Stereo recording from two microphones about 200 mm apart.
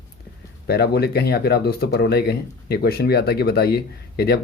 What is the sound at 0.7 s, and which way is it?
Speech, 50° left (ahead or behind).